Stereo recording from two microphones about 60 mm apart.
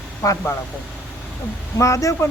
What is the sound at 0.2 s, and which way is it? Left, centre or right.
Speech, left.